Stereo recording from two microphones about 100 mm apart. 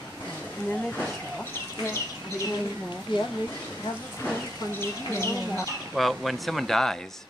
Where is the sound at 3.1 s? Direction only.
50° left (ahead or behind).